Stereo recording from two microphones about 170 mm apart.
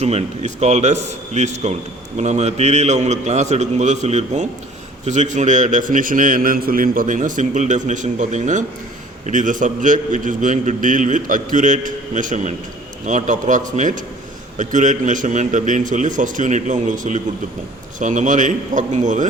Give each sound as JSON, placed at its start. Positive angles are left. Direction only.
{"t": 0.0, "sound": "a man's voice", "side_deg": -40}